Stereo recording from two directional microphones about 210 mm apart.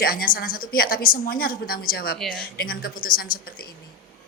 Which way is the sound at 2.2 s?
5° left (ahead or behind).